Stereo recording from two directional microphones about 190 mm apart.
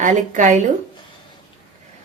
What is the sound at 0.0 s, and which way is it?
Speech, 40° right (ahead or behind).